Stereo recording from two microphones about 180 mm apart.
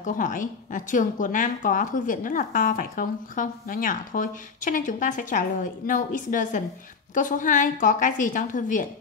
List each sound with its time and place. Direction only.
0.0 s a woman's voice: 45° left (ahead or behind)